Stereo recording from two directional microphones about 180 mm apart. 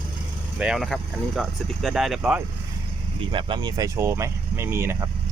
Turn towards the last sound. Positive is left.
turn(degrees=-15)  # may be behind; listen again after turning